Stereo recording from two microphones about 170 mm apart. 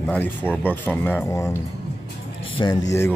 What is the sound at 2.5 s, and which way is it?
Speech, 25° left (ahead or behind).